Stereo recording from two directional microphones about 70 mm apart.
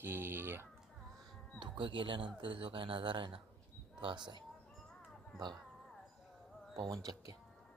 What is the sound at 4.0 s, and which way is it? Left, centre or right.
Speech, right.